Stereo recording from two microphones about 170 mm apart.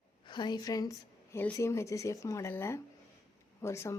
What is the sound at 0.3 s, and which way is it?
A woman's voice, 25° left (ahead or behind).